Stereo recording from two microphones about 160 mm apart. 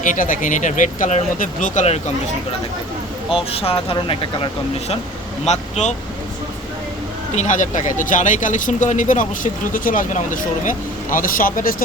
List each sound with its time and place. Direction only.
0.0 s speech: 55° left (ahead or behind)
3.3 s speech: 35° left (ahead or behind)
5.5 s speech: 45° left (ahead or behind)
7.3 s speech: 50° left (ahead or behind)